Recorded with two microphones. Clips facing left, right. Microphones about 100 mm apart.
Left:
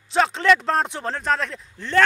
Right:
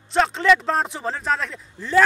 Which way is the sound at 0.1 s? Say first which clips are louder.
Even; centre (ahead or behind).